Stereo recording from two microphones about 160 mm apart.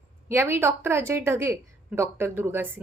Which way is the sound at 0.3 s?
15° right (ahead or behind).